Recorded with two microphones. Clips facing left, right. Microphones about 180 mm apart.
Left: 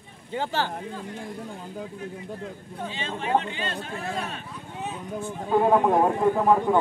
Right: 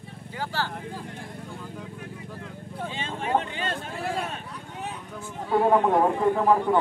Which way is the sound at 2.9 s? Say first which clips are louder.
Left 1 dB; 50° right (ahead or behind).